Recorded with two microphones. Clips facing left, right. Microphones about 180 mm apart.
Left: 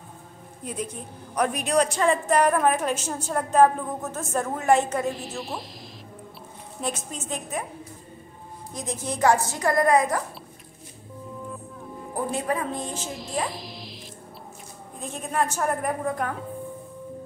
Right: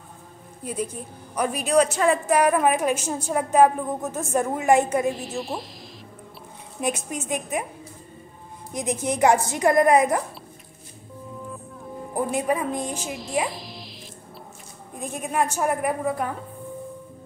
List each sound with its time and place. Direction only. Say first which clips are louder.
1.3 s a woman's voice: right 2 dB; 5° right (ahead or behind)
5.1 s speech: right 3 dB; centre (ahead or behind)
6.8 s a woman's voice: right 4 dB; 15° right (ahead or behind)
8.7 s a woman's voice: right 5 dB; 20° right (ahead or behind)
12.3 s a woman's voice: right 3 dB; 15° right (ahead or behind)
13.1 s speech: right 3 dB; centre (ahead or behind)
15.0 s a woman's voice: right 2 dB; 10° right (ahead or behind)